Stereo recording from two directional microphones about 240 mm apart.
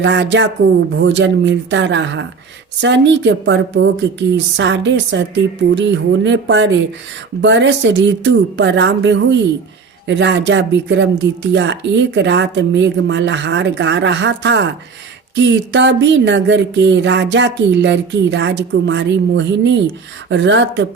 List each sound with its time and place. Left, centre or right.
0.0 s a woman's voice: right